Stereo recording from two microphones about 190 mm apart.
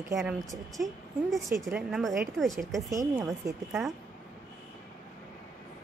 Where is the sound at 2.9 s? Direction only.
15° right (ahead or behind).